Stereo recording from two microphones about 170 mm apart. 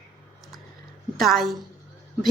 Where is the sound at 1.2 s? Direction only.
Centre (ahead or behind).